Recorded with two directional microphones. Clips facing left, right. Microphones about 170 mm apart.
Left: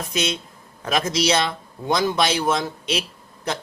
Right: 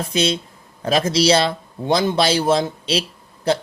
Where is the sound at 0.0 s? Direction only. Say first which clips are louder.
Right 5 dB; 30° right (ahead or behind).